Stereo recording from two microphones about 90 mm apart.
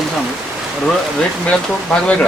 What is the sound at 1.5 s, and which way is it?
Speech, 10° left (ahead or behind).